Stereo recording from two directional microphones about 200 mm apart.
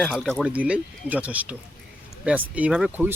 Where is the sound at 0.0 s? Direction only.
Centre (ahead or behind).